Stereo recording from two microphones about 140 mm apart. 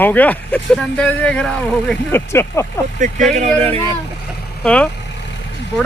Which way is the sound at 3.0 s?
65° right (ahead or behind).